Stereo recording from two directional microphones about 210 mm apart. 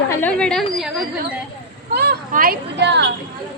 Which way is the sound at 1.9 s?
50° right (ahead or behind).